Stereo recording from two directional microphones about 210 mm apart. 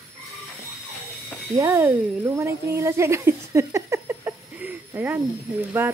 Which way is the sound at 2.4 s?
15° right (ahead or behind).